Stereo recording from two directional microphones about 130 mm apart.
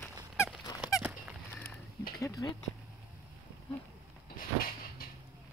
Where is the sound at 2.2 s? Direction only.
25° left (ahead or behind).